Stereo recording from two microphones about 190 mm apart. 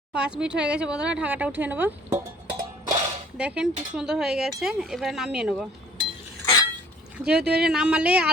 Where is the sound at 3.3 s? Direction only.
5° right (ahead or behind).